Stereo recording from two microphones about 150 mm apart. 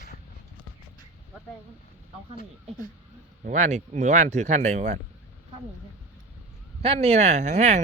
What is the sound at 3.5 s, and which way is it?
Speech, 55° right (ahead or behind).